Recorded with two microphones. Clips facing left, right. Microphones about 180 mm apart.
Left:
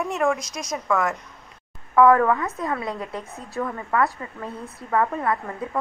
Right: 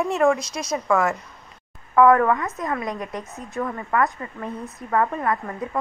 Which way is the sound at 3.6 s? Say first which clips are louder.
Even; 5° left (ahead or behind).